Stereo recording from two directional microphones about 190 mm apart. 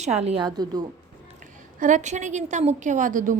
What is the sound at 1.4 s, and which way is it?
A woman's voice, 45° right (ahead or behind).